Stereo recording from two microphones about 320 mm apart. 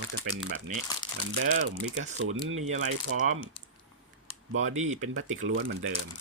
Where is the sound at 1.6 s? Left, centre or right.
Right.